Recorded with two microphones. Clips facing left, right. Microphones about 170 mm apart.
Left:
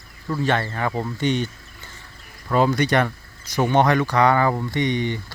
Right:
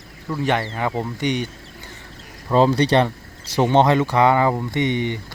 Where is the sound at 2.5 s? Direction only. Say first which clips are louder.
Right 3 dB; 30° right (ahead or behind).